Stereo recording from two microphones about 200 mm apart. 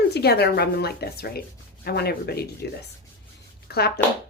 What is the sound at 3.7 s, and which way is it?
Speech, 50° left (ahead or behind).